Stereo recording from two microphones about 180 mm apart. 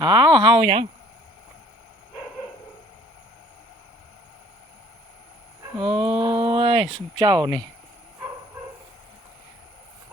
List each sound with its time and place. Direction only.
0.0 s speech: 25° right (ahead or behind)
5.8 s speech: 30° right (ahead or behind)